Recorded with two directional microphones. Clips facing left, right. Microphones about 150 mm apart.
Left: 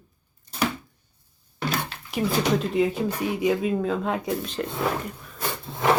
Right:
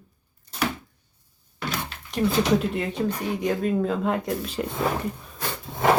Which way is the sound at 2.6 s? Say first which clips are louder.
Left 3 dB; centre (ahead or behind).